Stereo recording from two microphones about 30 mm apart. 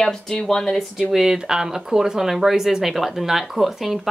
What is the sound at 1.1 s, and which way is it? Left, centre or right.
Speech, centre.